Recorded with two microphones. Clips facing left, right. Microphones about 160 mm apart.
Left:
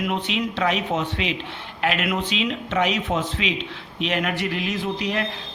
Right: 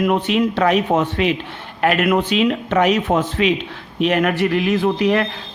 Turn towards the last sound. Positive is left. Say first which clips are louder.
# right 9 dB
turn(degrees=-60)  # may be behind; listen again after turning